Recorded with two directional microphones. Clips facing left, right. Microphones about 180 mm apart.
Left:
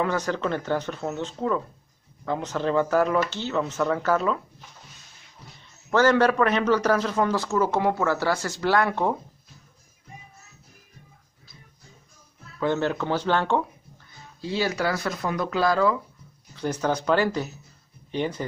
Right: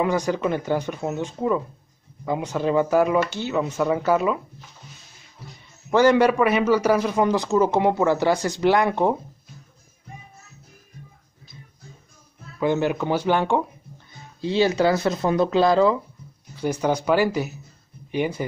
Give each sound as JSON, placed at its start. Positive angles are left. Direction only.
{"t": 0.0, "sound": "a man's voice", "side_deg": -10}
{"t": 5.4, "sound": "a sound", "side_deg": -5}
{"t": 5.9, "sound": "a man's voice", "side_deg": -15}
{"t": 12.5, "sound": "a man's voice", "side_deg": -15}
{"t": 16.5, "sound": "a man's voice", "side_deg": -10}